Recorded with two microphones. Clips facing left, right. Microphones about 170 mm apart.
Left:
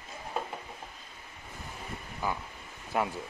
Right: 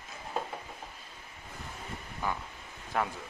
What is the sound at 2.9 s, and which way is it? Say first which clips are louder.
Speech: left 2 dB; 10° left (ahead or behind).